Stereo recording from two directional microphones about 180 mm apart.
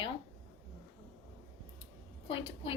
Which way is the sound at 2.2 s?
30° left (ahead or behind).